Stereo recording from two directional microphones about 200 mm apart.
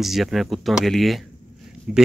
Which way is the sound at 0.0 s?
Centre (ahead or behind).